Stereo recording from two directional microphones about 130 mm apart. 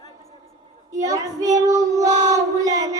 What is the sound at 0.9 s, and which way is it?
Child singing, 25° right (ahead or behind).